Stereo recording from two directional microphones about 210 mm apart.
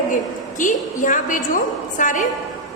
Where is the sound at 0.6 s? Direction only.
40° left (ahead or behind).